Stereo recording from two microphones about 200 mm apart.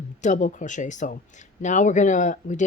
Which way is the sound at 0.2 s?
40° left (ahead or behind).